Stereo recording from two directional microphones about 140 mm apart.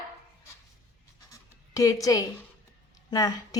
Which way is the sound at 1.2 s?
25° left (ahead or behind).